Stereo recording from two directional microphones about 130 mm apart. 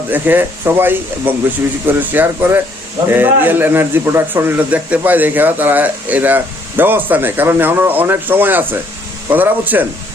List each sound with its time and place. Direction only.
0.1 s a man's voice: 15° right (ahead or behind)